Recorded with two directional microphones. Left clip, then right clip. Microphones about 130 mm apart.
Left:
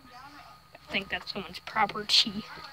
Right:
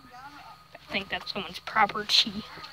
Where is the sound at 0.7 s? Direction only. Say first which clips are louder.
Even; 10° left (ahead or behind).